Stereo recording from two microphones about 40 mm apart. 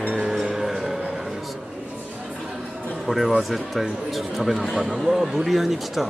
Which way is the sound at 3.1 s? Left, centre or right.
Centre.